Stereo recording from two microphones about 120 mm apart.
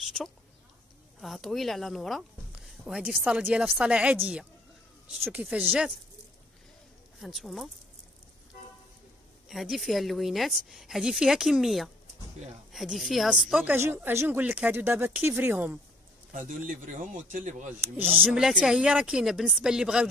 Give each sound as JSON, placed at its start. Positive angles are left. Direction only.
{"t": 0.0, "sound": "a sound", "side_deg": 0}
{"t": 1.2, "sound": "speech", "side_deg": 0}
{"t": 7.2, "sound": "a woman's voice", "side_deg": 0}
{"t": 9.5, "sound": "a woman's voice", "side_deg": 0}
{"t": 13.7, "sound": "speech", "side_deg": -15}
{"t": 16.3, "sound": "a man's voice", "side_deg": -90}
{"t": 18.3, "sound": "a woman's voice", "side_deg": -5}